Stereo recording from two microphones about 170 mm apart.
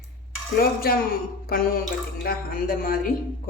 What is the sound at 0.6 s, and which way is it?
Speech, 60° left (ahead or behind).